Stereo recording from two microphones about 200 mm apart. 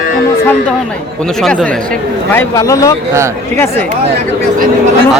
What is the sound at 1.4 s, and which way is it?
Speech, centre (ahead or behind).